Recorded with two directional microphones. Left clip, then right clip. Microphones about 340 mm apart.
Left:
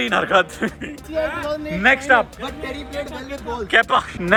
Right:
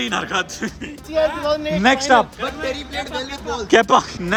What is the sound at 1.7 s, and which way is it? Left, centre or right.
Speech, centre.